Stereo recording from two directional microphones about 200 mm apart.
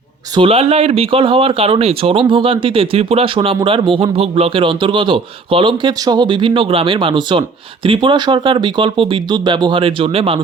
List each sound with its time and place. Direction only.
0.3 s speech: 30° right (ahead or behind)